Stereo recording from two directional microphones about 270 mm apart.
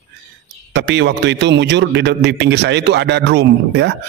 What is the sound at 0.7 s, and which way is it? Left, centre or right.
A man's voice, right.